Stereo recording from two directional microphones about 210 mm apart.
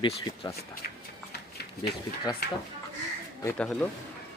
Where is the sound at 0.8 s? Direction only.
45° left (ahead or behind).